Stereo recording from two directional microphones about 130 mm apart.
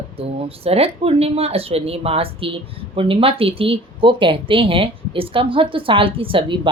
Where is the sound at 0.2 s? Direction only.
50° right (ahead or behind).